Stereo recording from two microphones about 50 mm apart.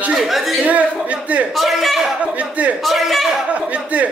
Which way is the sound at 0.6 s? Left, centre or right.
Right.